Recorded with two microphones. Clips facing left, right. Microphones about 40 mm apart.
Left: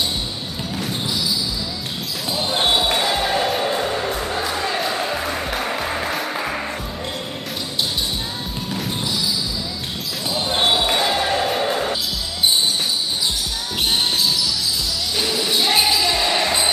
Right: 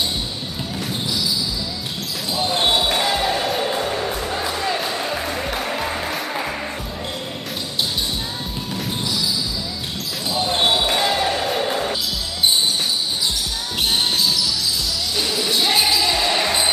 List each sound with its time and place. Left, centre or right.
2.3 s basketball bounce: centre
10.3 s basketball bounce: centre
15.1 s basketball bounce: centre